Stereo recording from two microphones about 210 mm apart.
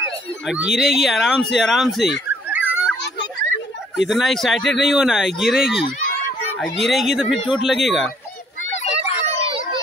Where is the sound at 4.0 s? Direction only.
Centre (ahead or behind).